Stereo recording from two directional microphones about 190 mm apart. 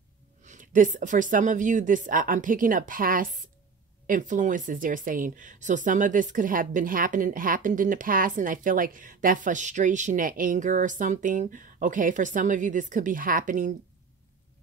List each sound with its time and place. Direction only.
0.4 s speech: 40° right (ahead or behind)